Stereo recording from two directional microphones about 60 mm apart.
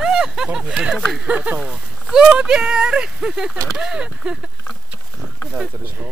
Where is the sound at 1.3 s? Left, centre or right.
Right.